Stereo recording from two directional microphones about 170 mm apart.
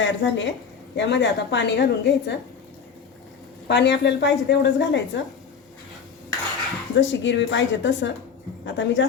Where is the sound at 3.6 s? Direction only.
85° left.